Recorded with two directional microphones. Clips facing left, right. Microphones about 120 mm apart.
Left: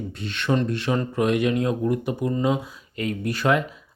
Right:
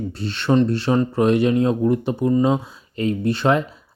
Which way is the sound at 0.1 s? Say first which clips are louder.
Right 5 dB; 35° right (ahead or behind).